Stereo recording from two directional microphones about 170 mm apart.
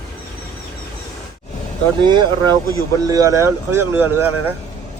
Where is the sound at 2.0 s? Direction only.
25° right (ahead or behind).